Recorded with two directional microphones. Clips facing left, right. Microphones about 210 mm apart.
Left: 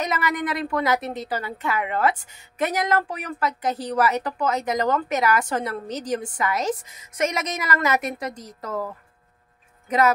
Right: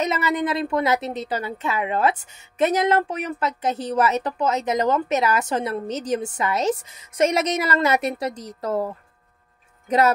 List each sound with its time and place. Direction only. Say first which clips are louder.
0.0 s a woman's voice: right 3 dB; 25° right (ahead or behind)